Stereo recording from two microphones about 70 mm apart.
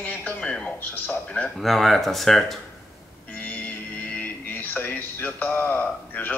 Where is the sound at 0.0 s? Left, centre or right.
Centre.